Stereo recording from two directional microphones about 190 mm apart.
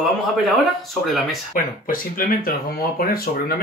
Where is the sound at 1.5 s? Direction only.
45° left (ahead or behind).